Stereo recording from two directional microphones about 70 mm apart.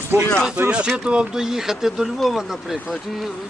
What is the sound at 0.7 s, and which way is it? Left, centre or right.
Speech, centre.